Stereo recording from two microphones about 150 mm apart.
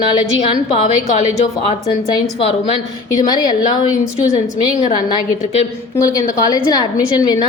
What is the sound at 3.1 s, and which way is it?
Speech, 25° left (ahead or behind).